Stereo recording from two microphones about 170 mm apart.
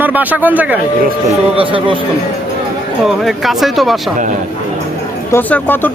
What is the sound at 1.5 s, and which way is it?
Speech, 30° right (ahead or behind).